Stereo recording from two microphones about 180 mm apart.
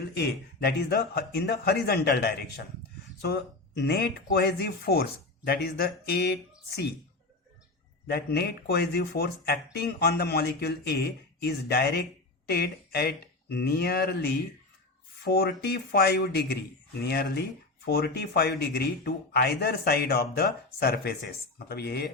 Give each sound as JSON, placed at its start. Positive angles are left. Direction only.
{"t": 0.2, "sound": "speech", "side_deg": 60}
{"t": 8.0, "sound": "speech", "side_deg": 60}